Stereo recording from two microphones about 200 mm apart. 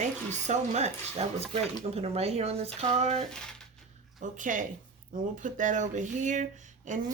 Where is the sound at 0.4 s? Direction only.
35° right (ahead or behind).